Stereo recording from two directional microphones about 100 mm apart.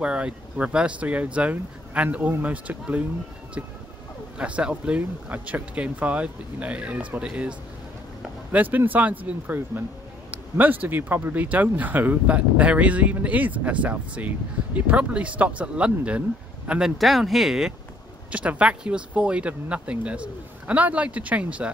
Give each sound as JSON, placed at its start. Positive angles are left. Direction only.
{"t": 0.0, "sound": "speech", "side_deg": -10}
{"t": 4.4, "sound": "speech", "side_deg": -10}
{"t": 17.0, "sound": "speech", "side_deg": 0}